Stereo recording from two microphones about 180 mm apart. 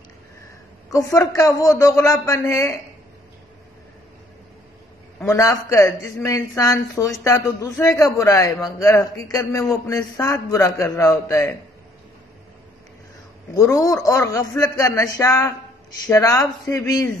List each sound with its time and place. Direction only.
0.9 s speech: 15° left (ahead or behind)
5.2 s speech: 15° left (ahead or behind)
13.6 s speech: 20° left (ahead or behind)